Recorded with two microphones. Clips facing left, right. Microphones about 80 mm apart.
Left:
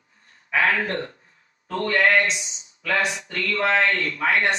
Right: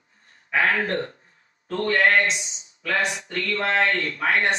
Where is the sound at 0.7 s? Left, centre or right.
Right.